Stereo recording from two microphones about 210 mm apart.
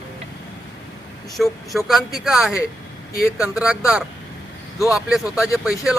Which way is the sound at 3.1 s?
45° left (ahead or behind).